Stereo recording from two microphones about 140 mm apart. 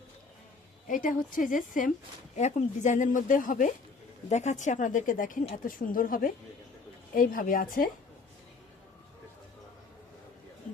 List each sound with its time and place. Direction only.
0.9 s speech: 70° left (ahead or behind)
2.3 s speech: 55° left (ahead or behind)
4.3 s a woman's voice: 55° left (ahead or behind); by 7.9 s 85° left